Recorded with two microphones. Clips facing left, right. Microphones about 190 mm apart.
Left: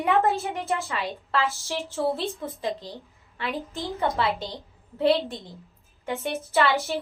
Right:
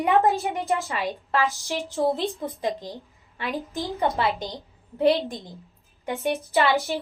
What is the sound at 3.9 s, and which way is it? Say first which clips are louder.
A woman's voice: right 1 dB; 15° right (ahead or behind).